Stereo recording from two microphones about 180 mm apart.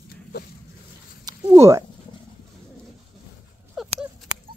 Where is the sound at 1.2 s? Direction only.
20° right (ahead or behind).